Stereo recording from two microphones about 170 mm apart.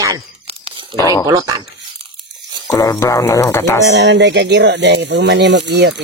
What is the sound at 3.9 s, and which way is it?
Speech, 90° right.